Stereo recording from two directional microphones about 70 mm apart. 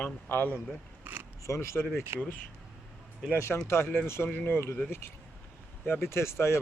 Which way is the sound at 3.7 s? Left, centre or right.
Left.